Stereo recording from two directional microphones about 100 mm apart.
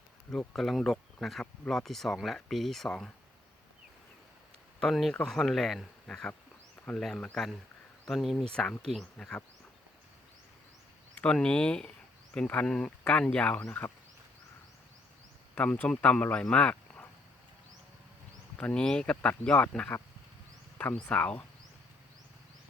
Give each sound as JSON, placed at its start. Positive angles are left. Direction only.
{"t": 0.3, "sound": "speech", "side_deg": 5}
{"t": 4.8, "sound": "speech", "side_deg": 0}
{"t": 11.1, "sound": "speech", "side_deg": 10}
{"t": 15.5, "sound": "speech", "side_deg": 15}
{"t": 18.5, "sound": "speech", "side_deg": 10}